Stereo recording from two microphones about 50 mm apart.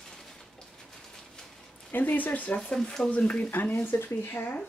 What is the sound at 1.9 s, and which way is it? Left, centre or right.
Speech, left.